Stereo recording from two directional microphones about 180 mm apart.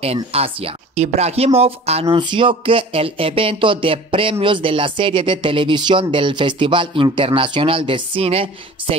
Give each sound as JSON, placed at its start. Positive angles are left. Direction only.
{"t": 0.0, "sound": "speech", "side_deg": -35}